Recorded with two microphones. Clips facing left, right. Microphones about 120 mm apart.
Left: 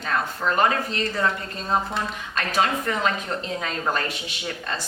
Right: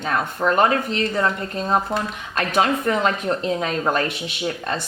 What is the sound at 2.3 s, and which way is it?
Speech, 50° right (ahead or behind).